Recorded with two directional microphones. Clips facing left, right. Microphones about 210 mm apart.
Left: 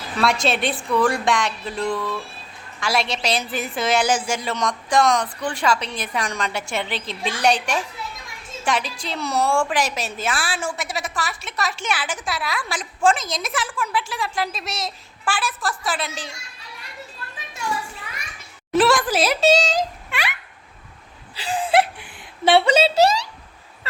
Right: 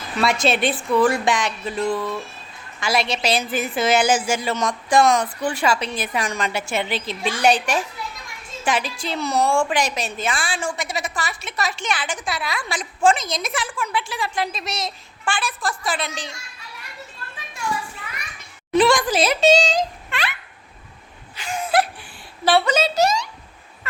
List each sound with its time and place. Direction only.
0.2 s a woman's voice: centre (ahead or behind)
18.7 s speech: 5° left (ahead or behind)
21.5 s a woman's voice: 30° left (ahead or behind)
23.9 s vehicle: 35° left (ahead or behind)